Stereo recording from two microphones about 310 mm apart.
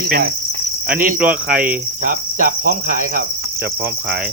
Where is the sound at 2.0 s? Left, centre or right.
Right.